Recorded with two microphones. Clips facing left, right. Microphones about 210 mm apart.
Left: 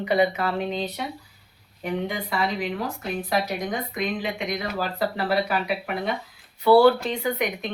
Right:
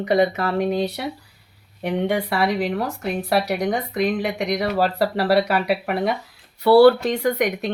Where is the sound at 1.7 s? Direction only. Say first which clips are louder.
Right 6 dB; 70° right (ahead or behind).